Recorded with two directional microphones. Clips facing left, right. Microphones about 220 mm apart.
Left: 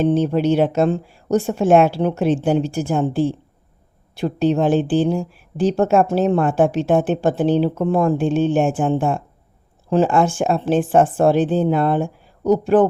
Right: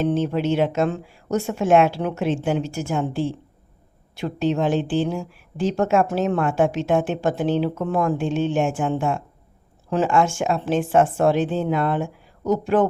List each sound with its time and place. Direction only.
0.0 s speech: 40° left (ahead or behind)
4.2 s speech: 35° left (ahead or behind)